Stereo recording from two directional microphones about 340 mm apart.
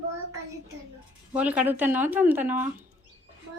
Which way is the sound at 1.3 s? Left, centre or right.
Centre.